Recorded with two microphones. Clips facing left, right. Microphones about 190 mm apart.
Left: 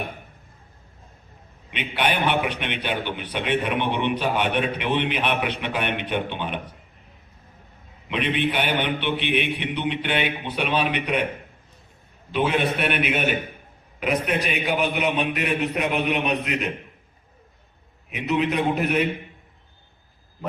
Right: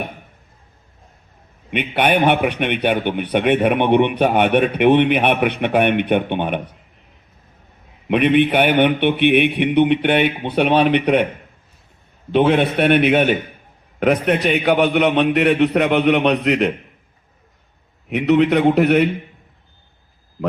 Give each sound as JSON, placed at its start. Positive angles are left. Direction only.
{"t": 1.7, "sound": "a man's voice", "side_deg": -55}
{"t": 8.0, "sound": "a man's voice", "side_deg": -55}
{"t": 12.3, "sound": "a man's voice", "side_deg": -55}
{"t": 18.1, "sound": "a man's voice", "side_deg": -70}